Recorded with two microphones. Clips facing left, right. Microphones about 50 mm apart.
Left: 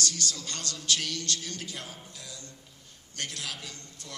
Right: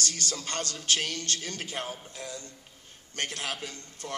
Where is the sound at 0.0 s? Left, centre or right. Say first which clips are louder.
Even; right.